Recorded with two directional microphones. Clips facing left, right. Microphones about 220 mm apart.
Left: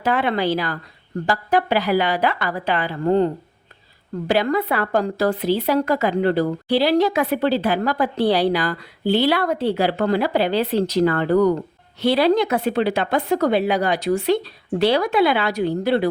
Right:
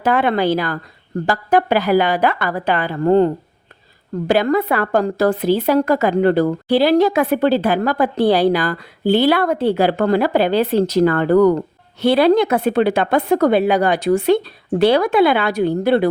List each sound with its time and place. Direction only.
0.0 s a woman's voice: 50° right (ahead or behind)
4.3 s a woman's voice: 50° right (ahead or behind)